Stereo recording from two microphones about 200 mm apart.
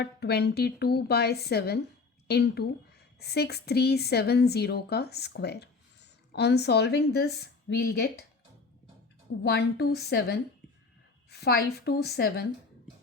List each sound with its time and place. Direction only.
0.0 s a woman's voice: 55° left (ahead or behind)
9.4 s a woman's voice: 55° left (ahead or behind)